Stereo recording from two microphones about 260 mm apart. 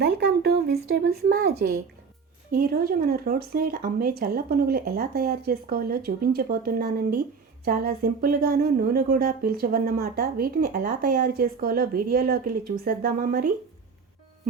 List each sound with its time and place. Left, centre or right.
0.0 s speech: right